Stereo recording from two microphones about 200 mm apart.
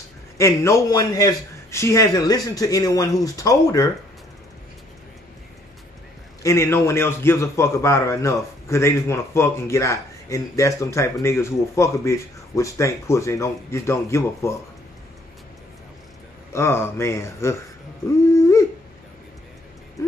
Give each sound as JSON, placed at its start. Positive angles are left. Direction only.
{"t": 0.4, "sound": "a man's voice", "side_deg": 15}
{"t": 6.4, "sound": "a man's voice", "side_deg": 15}
{"t": 16.5, "sound": "a man's voice", "side_deg": 10}
{"t": 18.3, "sound": "dog", "side_deg": 15}
{"t": 20.0, "sound": "speech", "side_deg": 15}